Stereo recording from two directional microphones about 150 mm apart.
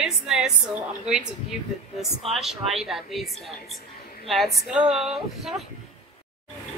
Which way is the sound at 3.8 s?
90° left.